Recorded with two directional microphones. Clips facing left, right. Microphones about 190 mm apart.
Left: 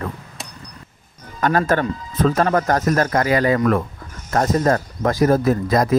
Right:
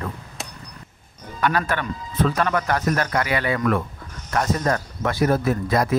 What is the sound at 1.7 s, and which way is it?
Speech, 40° left (ahead or behind).